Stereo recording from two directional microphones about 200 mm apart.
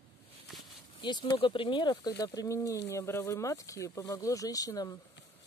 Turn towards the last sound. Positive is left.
turn(degrees=20)  # may be behind; listen again after turning